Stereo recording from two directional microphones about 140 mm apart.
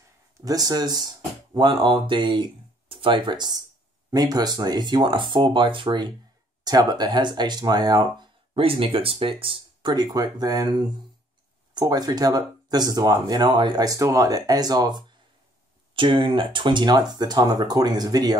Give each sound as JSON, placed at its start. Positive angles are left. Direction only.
{"t": 0.5, "sound": "speech", "side_deg": -30}